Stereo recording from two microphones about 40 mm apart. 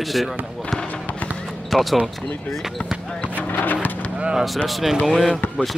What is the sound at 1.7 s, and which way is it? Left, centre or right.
Speech, centre.